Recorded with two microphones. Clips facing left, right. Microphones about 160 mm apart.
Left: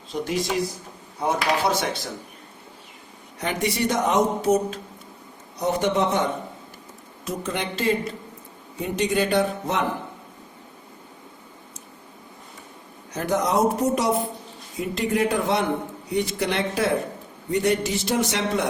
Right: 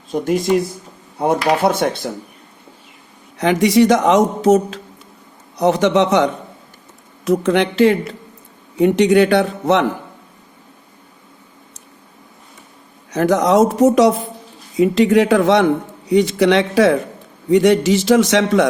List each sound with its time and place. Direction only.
0.1 s speech: 45° right (ahead or behind)
3.3 s a man's voice: 90° right
7.3 s speech: 75° right (ahead or behind)
13.1 s a man's voice: 90° right